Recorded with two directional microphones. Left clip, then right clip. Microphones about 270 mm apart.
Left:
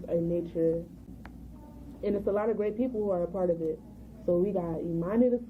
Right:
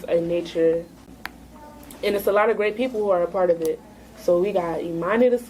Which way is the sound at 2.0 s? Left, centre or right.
Centre.